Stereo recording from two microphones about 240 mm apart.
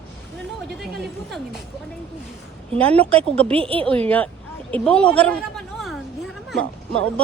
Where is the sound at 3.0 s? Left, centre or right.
Centre.